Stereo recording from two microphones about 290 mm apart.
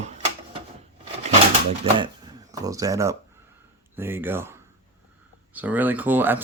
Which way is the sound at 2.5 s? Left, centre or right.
Centre.